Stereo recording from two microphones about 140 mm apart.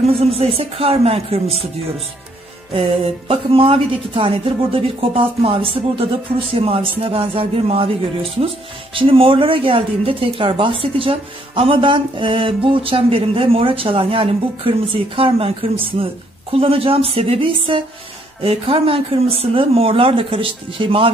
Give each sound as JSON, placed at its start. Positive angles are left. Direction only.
{"t": 0.0, "sound": "speech", "side_deg": -45}
{"t": 2.7, "sound": "a woman's voice", "side_deg": -40}